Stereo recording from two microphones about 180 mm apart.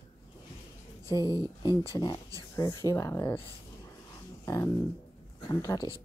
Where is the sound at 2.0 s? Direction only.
20° left (ahead or behind).